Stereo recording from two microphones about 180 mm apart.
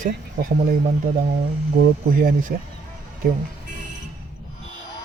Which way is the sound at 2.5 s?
55° right (ahead or behind).